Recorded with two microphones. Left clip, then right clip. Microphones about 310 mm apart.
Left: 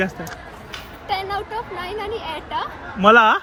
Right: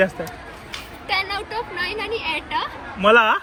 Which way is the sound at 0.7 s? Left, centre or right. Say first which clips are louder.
Even; left.